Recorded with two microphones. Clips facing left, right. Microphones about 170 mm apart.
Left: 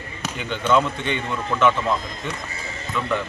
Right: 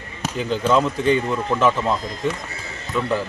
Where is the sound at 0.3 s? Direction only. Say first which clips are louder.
Right 2 dB; 35° right (ahead or behind).